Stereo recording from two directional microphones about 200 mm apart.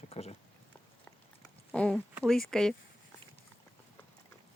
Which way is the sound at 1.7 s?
5° left (ahead or behind).